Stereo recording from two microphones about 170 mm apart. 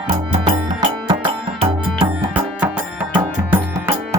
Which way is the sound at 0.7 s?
30° right (ahead or behind).